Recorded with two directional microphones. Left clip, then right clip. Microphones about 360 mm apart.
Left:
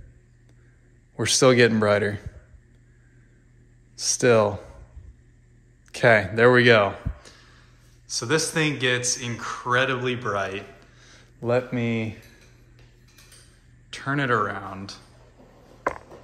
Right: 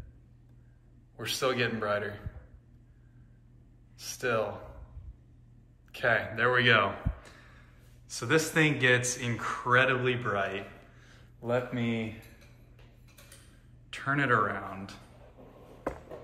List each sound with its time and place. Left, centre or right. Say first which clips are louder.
1.1 s speech: left 12 dB; centre
3.9 s speech: left 12 dB; centre
5.9 s a sound: left 10 dB; centre
8.1 s speech: left 4 dB; centre
13.8 s speech: left 3 dB; centre